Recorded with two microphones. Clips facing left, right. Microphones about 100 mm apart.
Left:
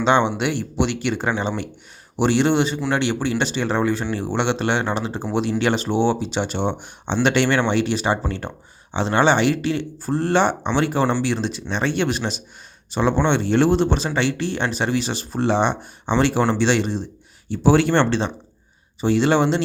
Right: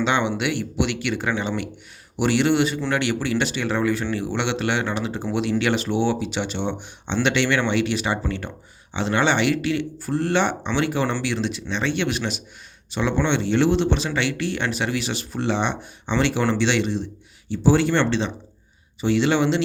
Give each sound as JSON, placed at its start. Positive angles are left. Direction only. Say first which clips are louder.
{"t": 0.0, "sound": "speech", "louder": "left 4 dB", "side_deg": 35}
{"t": 17.5, "sound": "speech", "louder": "left 2 dB", "side_deg": 60}